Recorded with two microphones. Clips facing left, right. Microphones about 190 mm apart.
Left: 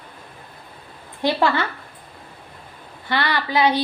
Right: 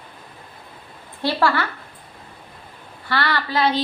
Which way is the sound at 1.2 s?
20° left (ahead or behind).